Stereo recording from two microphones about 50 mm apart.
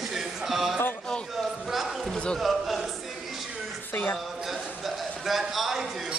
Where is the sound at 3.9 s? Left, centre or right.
Left.